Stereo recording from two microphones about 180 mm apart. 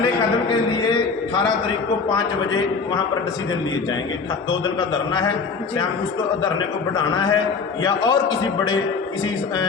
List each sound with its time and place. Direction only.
0.4 s a man's voice: 25° left (ahead or behind)
6.9 s a man's voice: 25° left (ahead or behind)